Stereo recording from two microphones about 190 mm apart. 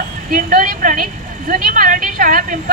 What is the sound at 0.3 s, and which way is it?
A woman's voice, 45° right (ahead or behind).